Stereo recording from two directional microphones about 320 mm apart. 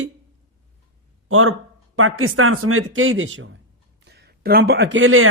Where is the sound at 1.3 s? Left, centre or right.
Right.